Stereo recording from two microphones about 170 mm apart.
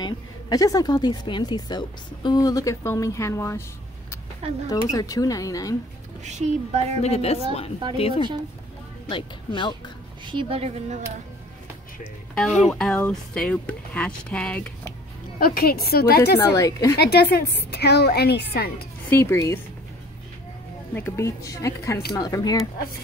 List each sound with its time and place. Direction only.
0.0 s a woman's voice: 20° left (ahead or behind)
4.6 s a woman's voice: 20° left (ahead or behind)
6.2 s a woman's voice: 40° right (ahead or behind)
7.0 s a woman's voice: 40° left (ahead or behind)
9.1 s a woman's voice: 30° left (ahead or behind)
10.2 s a woman's voice: 30° right (ahead or behind)
12.6 s speech: 5° left (ahead or behind)
15.3 s a woman's voice: 60° left (ahead or behind)
16.3 s a woman's voice: 20° left (ahead or behind)
17.0 s a woman's voice: 75° left (ahead or behind)
19.0 s speech: 15° left (ahead or behind)
20.9 s a woman's voice: 15° left (ahead or behind)